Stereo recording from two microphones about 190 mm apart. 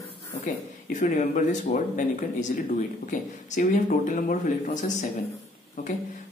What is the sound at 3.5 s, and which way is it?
Speech, 40° left (ahead or behind).